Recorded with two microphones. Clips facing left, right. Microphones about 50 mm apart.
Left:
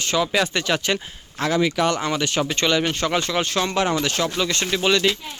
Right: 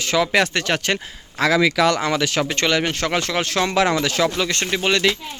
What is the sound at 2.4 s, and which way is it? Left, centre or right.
Speech, right.